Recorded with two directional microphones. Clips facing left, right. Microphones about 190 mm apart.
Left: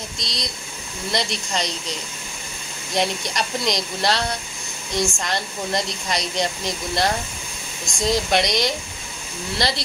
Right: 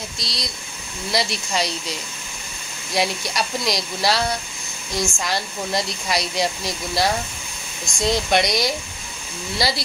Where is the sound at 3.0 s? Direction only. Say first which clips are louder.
Even; 5° right (ahead or behind).